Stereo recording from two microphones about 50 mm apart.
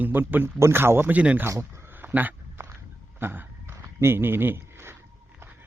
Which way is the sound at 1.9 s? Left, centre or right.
Right.